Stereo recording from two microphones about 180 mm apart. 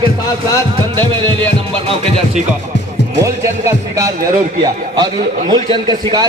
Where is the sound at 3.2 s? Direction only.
15° right (ahead or behind).